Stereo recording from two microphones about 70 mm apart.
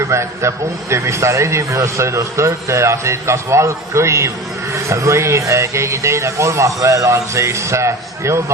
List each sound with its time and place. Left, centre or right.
0.1 s a man's voice: right